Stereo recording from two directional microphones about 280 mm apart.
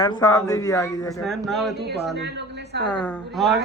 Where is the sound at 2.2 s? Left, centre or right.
Right.